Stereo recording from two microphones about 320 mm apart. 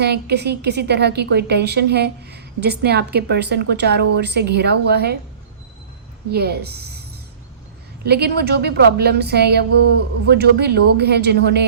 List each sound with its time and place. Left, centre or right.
0.0 s a woman's voice: right
6.3 s a woman's voice: right
8.0 s a woman's voice: right